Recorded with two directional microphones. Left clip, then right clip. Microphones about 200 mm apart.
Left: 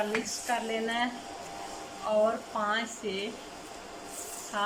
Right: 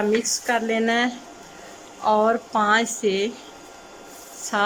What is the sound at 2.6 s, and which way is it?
Speech, 55° right (ahead or behind).